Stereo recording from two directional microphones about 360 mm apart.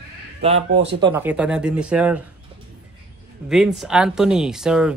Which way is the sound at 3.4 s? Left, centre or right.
Centre.